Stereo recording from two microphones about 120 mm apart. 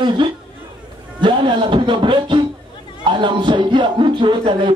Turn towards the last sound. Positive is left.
turn(degrees=-45)  # may be behind; listen again after turning